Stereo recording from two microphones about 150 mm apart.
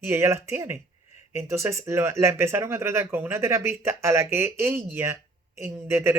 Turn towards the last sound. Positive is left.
turn(degrees=-15)  # may be behind; listen again after turning